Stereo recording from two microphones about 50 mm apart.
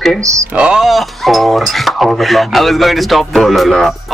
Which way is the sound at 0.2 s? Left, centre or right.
Right.